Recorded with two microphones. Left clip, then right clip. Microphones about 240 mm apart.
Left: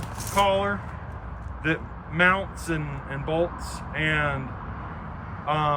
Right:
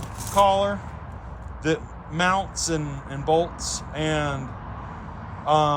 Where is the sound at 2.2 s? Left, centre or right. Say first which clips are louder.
Left 1 dB; centre.